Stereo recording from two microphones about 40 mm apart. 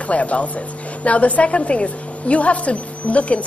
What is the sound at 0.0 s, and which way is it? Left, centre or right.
Speech, left.